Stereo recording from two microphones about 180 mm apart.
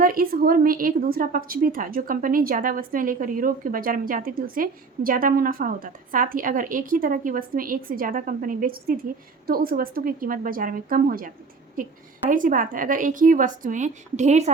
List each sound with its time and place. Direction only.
0.0 s a woman's voice: 55° right (ahead or behind)